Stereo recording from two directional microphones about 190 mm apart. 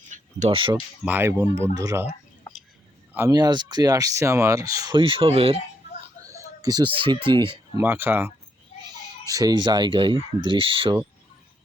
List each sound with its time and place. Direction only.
0.1 s speech: 35° right (ahead or behind)
1.0 s speech: 10° right (ahead or behind)
3.1 s speech: 15° right (ahead or behind)
6.1 s speech: 15° right (ahead or behind)
7.8 s speech: 10° right (ahead or behind); by 11.0 s 30° right (ahead or behind)